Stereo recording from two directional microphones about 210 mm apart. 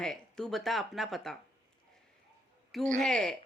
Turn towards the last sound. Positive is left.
turn(degrees=5)  # may be behind; listen again after turning